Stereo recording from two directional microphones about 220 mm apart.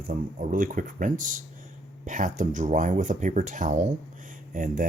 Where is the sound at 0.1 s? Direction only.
40° right (ahead or behind).